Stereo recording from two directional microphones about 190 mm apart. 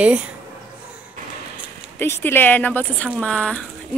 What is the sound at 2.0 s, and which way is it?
Speech, 10° left (ahead or behind).